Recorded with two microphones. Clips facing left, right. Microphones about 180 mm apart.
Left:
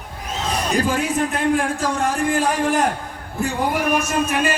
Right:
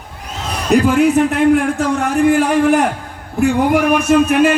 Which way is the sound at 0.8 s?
65° right (ahead or behind).